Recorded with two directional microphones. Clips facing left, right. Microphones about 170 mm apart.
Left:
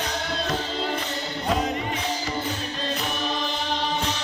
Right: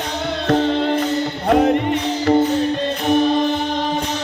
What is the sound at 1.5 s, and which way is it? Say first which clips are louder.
Music: right 11 dB; 60° right (ahead or behind).